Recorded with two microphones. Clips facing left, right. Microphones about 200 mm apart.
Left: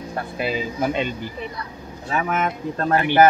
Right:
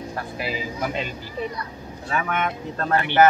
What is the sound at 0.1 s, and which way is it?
Speech, 25° left (ahead or behind).